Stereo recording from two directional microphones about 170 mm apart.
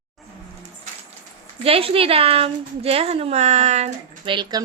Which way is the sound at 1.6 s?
35° right (ahead or behind).